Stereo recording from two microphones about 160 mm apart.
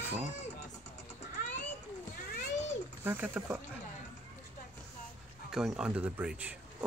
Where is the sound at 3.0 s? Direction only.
15° right (ahead or behind).